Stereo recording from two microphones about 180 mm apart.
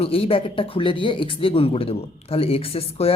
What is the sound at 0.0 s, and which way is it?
A woman's voice, 30° left (ahead or behind).